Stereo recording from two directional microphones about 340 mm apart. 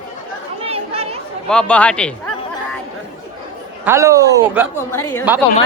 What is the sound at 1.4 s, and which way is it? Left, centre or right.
Speech, centre.